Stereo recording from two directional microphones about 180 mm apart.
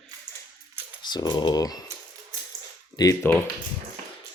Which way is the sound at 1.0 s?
25° left (ahead or behind).